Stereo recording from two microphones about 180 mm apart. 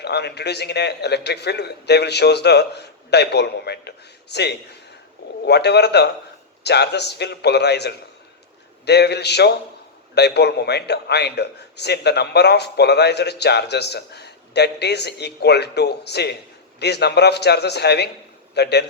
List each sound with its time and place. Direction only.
0.0 s a man's voice: 65° left (ahead or behind)